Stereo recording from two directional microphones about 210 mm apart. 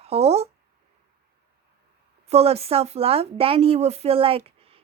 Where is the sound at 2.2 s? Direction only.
30° right (ahead or behind).